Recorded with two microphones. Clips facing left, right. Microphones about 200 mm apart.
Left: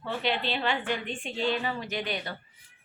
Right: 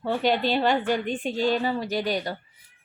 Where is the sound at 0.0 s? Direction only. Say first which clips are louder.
Right 7 dB; 45° right (ahead or behind).